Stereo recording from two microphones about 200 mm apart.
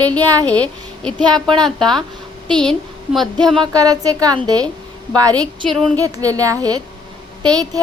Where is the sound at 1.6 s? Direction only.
Centre (ahead or behind).